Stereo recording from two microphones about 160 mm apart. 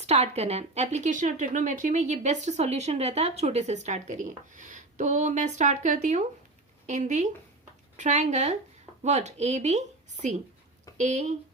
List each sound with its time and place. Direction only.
0.0 s speech: 40° right (ahead or behind)